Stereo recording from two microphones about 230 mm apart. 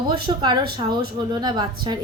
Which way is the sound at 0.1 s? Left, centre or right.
Right.